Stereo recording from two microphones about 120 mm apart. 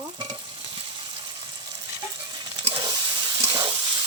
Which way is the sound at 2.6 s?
45° right (ahead or behind).